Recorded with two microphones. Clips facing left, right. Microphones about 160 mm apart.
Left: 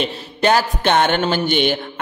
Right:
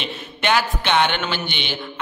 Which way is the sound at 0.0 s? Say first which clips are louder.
Left 7 dB; 40° left (ahead or behind).